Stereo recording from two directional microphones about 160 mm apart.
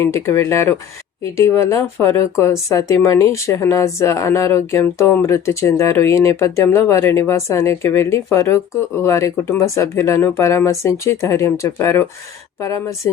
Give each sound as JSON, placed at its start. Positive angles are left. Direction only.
{"t": 0.0, "sound": "speech", "side_deg": 15}